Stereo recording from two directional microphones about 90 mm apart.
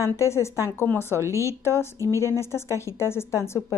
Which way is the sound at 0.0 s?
30° left (ahead or behind).